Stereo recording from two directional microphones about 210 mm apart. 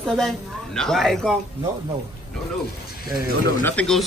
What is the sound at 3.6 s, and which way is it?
Speech, 5° left (ahead or behind).